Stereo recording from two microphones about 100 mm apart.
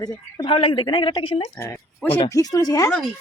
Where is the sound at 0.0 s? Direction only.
45° left (ahead or behind); by 1.5 s 65° left (ahead or behind).